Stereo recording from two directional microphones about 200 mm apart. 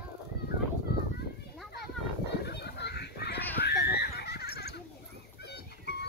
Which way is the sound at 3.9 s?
55° left (ahead or behind).